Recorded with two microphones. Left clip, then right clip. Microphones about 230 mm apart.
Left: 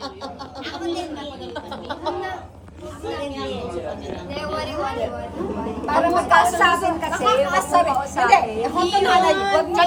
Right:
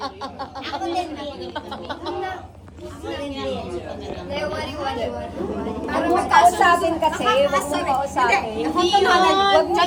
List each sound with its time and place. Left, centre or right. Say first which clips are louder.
3.1 s chatter: even; right
5.8 s a woman's voice: left 2 dB; centre